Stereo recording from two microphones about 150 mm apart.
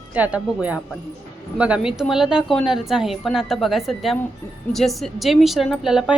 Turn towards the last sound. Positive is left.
turn(degrees=-5)  # may be behind; listen again after turning